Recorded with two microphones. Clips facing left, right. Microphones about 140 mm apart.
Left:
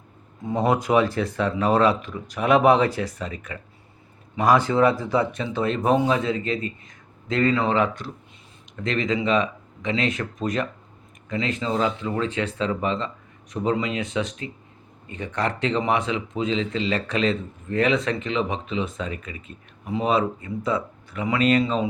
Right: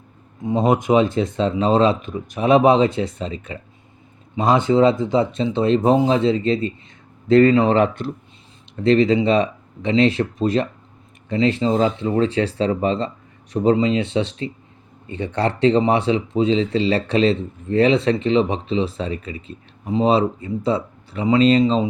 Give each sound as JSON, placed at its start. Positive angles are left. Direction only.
{"t": 0.4, "sound": "speech", "side_deg": -20}